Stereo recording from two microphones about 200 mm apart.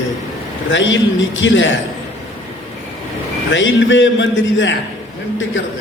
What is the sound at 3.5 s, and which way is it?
A man's voice, 65° left (ahead or behind).